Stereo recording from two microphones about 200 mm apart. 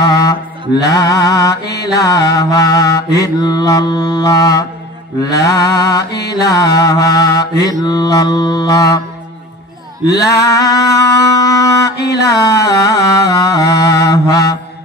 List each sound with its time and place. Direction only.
0.0 s mantra: 15° left (ahead or behind)
10.0 s mantra: 15° left (ahead or behind)